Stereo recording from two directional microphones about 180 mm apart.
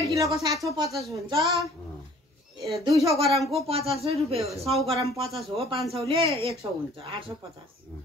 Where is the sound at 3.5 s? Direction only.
35° right (ahead or behind).